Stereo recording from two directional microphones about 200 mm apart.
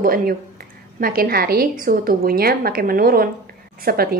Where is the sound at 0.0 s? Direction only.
45° right (ahead or behind).